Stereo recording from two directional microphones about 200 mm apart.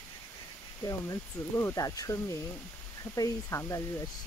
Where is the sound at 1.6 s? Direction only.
15° left (ahead or behind).